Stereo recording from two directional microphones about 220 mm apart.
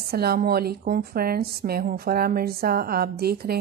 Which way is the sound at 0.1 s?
45° right (ahead or behind).